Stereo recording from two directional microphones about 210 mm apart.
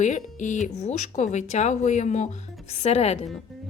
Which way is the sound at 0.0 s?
35° left (ahead or behind).